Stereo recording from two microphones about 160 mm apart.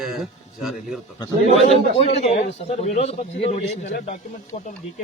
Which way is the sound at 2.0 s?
40° left (ahead or behind).